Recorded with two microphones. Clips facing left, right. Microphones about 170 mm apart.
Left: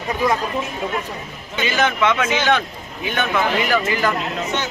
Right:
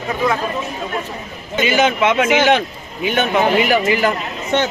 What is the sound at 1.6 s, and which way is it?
Speech, 15° right (ahead or behind).